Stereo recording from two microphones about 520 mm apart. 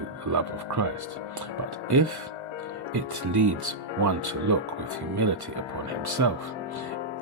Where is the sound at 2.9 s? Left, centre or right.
Right.